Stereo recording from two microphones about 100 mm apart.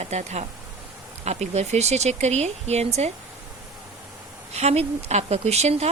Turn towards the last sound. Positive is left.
turn(degrees=-90)